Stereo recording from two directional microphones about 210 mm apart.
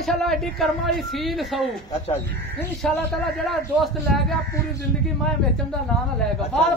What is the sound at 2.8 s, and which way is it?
Speech, centre (ahead or behind).